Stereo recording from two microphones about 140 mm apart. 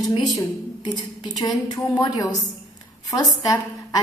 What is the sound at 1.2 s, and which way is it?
A woman's voice, 30° left (ahead or behind).